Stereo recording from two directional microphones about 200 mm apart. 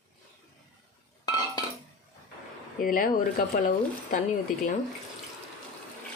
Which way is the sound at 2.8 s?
45° left (ahead or behind).